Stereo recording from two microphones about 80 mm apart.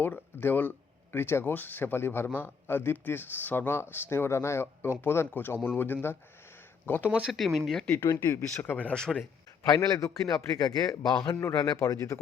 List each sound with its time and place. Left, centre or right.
0.0 s a man's voice: left
7.1 s speech: centre
7.3 s speech: centre
7.9 s speech: left
8.6 s speech: centre
9.6 s a man's voice: left